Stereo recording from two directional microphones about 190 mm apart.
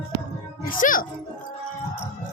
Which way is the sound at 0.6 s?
45° left (ahead or behind).